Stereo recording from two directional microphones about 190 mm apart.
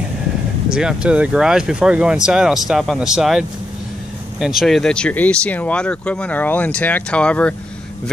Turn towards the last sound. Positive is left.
turn(degrees=5)  # may be behind; listen again after turning